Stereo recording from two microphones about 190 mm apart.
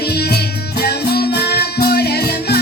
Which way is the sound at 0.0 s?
55° left (ahead or behind).